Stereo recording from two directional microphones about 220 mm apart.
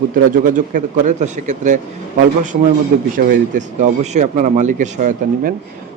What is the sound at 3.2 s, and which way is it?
Speech, 35° right (ahead or behind).